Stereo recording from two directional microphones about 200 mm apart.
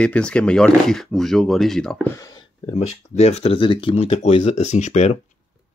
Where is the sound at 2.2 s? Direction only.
15° left (ahead or behind).